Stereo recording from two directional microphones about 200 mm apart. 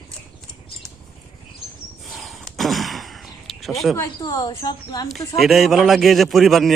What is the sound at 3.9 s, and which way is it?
Speech, 15° left (ahead or behind).